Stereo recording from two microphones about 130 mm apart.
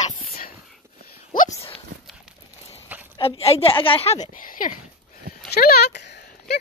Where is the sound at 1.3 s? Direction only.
90° left.